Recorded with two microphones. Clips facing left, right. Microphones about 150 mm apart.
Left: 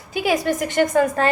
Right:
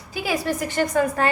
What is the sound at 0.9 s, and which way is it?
Speech, 45° left (ahead or behind).